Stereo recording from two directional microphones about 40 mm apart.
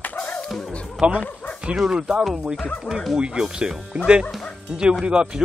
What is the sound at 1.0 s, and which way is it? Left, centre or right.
Speech, right.